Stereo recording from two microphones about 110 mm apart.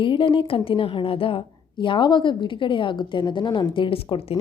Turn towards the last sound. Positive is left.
turn(degrees=55)  # may be behind; listen again after turning